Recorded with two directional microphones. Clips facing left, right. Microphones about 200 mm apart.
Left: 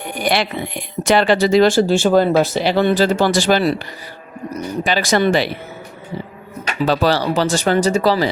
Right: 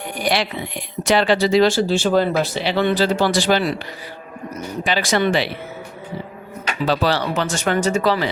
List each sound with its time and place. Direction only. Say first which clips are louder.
0.1 s speech: left 2 dB; 55° left (ahead or behind)
4.9 s speech: left 3 dB; 40° left (ahead or behind)
6.8 s speech: left 3 dB; 45° left (ahead or behind)